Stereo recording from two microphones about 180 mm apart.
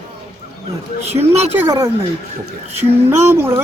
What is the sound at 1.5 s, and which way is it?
Speech, 15° right (ahead or behind).